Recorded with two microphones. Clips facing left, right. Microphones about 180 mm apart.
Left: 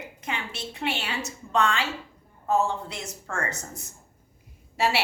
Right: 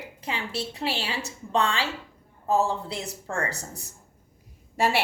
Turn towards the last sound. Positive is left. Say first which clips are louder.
# right 1 dB
turn(degrees=-50)  # may be behind; listen again after turning